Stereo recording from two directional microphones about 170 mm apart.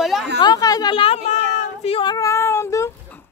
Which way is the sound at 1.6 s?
35° left (ahead or behind).